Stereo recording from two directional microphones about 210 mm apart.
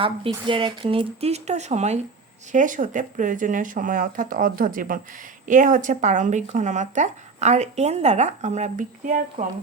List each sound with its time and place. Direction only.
0.0 s speech: 25° right (ahead or behind)